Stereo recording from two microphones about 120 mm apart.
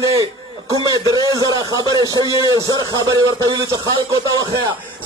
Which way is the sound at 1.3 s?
30° right (ahead or behind).